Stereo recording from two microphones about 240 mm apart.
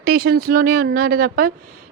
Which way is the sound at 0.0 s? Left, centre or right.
Right.